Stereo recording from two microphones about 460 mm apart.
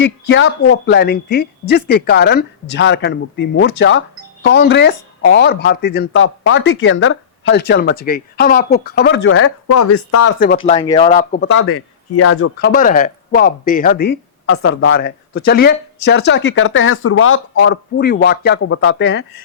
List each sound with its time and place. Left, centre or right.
0.0 s speech: left
10.4 s speech: centre